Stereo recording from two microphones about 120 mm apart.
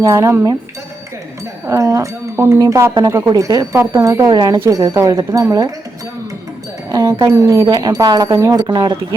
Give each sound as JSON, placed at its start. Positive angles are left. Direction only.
{"t": 0.0, "sound": "speech", "side_deg": -25}
{"t": 1.6, "sound": "speech", "side_deg": -25}
{"t": 4.3, "sound": "speech", "side_deg": -35}
{"t": 6.9, "sound": "speech", "side_deg": -25}